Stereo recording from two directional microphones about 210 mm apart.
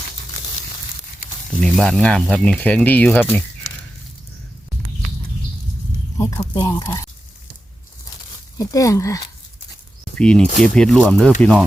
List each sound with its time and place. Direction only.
1.5 s speech: centre (ahead or behind)
6.1 s speech: 15° left (ahead or behind)
8.5 s speech: 15° left (ahead or behind)
10.2 s speech: 5° left (ahead or behind)